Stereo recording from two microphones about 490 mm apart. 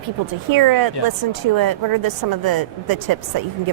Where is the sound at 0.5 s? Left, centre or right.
Right.